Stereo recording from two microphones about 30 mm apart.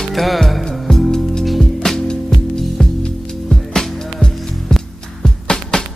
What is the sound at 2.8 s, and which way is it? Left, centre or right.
Music, left.